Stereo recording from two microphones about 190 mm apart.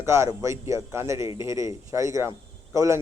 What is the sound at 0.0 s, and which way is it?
A man's voice, 15° right (ahead or behind).